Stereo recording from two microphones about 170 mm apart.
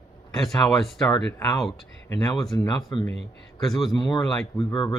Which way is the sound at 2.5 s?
20° left (ahead or behind).